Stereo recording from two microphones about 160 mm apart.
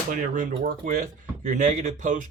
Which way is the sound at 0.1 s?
60° right (ahead or behind).